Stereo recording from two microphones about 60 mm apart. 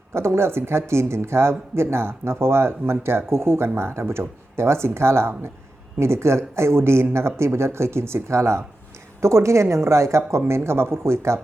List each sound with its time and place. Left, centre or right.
0.1 s speech: right